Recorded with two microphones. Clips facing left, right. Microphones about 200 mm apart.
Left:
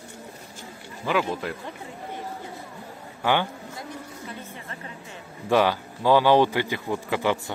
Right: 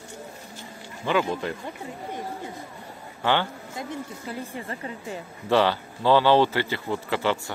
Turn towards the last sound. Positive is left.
turn(degrees=15)  # may be behind; listen again after turning